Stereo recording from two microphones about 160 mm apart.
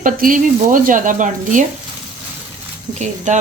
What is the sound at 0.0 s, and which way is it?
Speech, 55° right (ahead or behind).